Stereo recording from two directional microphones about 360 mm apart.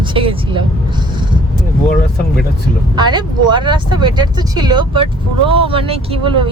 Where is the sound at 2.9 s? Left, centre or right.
Centre.